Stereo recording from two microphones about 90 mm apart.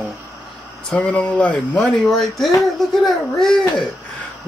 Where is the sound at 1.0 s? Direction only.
15° left (ahead or behind).